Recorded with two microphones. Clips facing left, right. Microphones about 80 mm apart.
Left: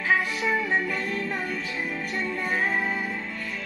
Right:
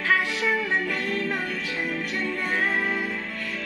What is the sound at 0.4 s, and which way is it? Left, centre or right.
Music, centre.